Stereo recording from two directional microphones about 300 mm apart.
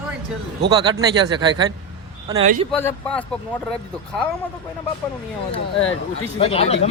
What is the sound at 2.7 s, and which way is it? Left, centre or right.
Speech, centre.